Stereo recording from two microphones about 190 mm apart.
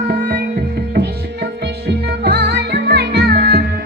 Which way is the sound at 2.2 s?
60° right (ahead or behind).